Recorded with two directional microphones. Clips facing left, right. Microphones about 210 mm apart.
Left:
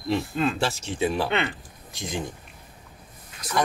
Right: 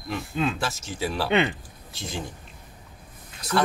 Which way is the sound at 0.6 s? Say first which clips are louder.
Left 4 dB; 30° left (ahead or behind).